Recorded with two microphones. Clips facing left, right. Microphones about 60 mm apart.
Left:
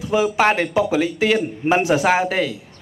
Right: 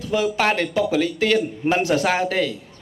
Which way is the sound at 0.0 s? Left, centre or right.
Centre.